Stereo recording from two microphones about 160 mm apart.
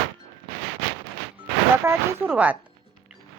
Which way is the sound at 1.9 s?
10° right (ahead or behind).